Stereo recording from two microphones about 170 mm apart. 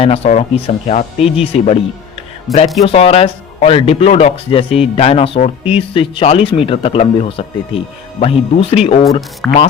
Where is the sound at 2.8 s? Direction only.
35° left (ahead or behind).